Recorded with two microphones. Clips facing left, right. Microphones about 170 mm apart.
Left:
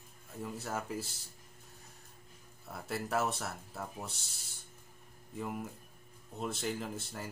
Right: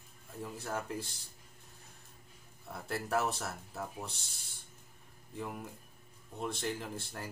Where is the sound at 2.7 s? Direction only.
Centre (ahead or behind).